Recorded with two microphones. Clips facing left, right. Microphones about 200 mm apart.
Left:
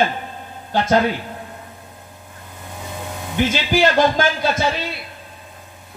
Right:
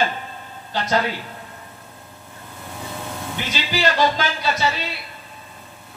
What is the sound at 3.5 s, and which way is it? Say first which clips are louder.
A man's voice: left 3 dB; 50° left (ahead or behind).